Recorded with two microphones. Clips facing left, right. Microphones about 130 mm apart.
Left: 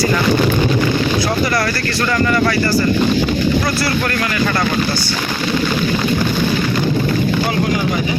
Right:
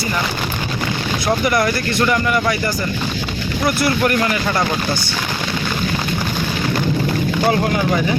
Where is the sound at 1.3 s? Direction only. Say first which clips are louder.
Right 1 dB; 15° right (ahead or behind).